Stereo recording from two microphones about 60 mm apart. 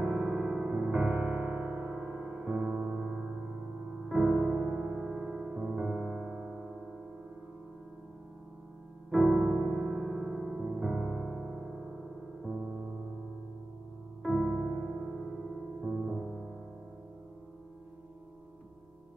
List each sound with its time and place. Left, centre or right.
0.0 s music: centre
2.0 s music: centre
2.7 s music: right
3.0 s gong: centre
4.1 s music: centre
5.5 s music: centre
9.3 s music: right
9.6 s music: centre
14.2 s music: centre
14.5 s music: centre
15.8 s music: right